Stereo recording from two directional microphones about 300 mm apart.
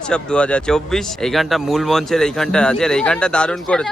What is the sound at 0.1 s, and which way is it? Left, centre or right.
Speech, centre.